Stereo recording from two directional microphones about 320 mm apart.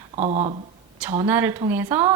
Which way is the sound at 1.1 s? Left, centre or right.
Centre.